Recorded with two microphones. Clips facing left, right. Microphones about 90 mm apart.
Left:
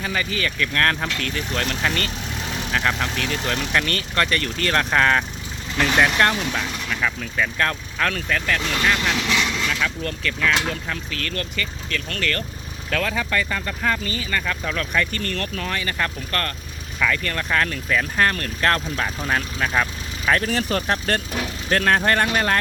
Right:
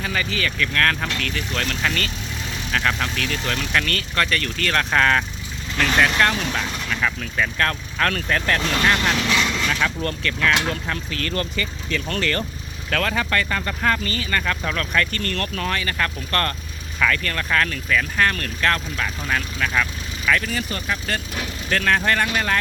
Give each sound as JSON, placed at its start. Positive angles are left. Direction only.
{"t": 0.0, "sound": "speech", "side_deg": 15}
{"t": 6.5, "sound": "speech", "side_deg": 0}
{"t": 8.4, "sound": "speech", "side_deg": -10}
{"t": 9.3, "sound": "vehicle", "side_deg": 10}
{"t": 9.6, "sound": "speech", "side_deg": -5}
{"t": 11.9, "sound": "speech", "side_deg": -20}
{"t": 12.2, "sound": "speech", "side_deg": -10}
{"t": 13.0, "sound": "speech", "side_deg": 5}
{"t": 16.3, "sound": "speech", "side_deg": 0}
{"t": 17.0, "sound": "speech", "side_deg": 15}
{"t": 20.5, "sound": "speech", "side_deg": 75}
{"t": 20.8, "sound": "speech", "side_deg": 55}
{"t": 21.7, "sound": "speech", "side_deg": 30}